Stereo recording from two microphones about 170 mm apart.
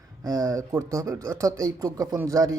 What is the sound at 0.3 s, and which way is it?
Speech, 20° right (ahead or behind).